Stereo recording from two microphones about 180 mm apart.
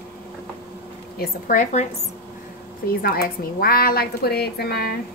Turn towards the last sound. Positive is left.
turn(degrees=60)  # may be behind; listen again after turning